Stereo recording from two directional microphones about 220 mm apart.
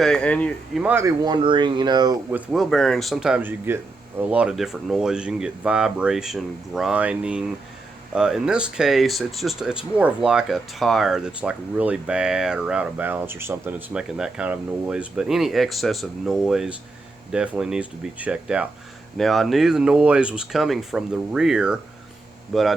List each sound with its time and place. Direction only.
0.0 s speech: 5° left (ahead or behind); by 2.1 s 20° right (ahead or behind)
2.3 s speech: centre (ahead or behind)